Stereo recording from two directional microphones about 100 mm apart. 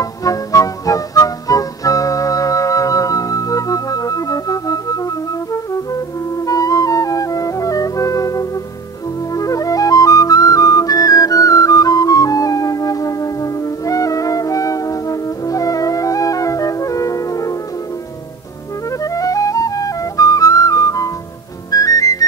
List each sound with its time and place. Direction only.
0.0 s music: 35° left (ahead or behind)
6.4 s flute: 35° left (ahead or behind)
18.9 s flute: 35° left (ahead or behind)
21.6 s music: 35° left (ahead or behind)